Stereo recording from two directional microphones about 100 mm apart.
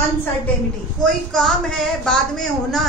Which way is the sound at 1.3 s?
5° left (ahead or behind).